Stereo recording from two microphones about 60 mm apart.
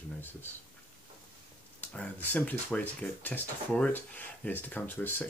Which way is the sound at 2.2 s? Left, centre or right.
Left.